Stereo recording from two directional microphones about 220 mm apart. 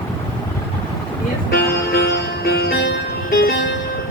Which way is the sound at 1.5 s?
45° left (ahead or behind).